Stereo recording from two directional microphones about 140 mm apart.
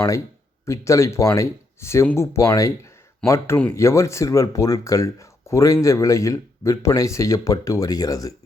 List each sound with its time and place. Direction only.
0.6 s speech: 20° left (ahead or behind)